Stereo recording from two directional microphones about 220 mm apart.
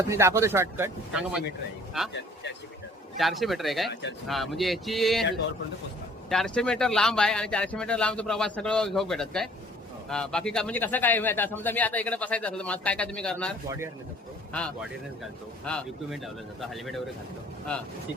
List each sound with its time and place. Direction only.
0.1 s speech: 10° right (ahead or behind)
2.1 s speech: 50° left (ahead or behind)
3.2 s speech: centre (ahead or behind)
6.3 s speech: centre (ahead or behind)
13.7 s speech: 10° right (ahead or behind)
14.5 s speech: centre (ahead or behind)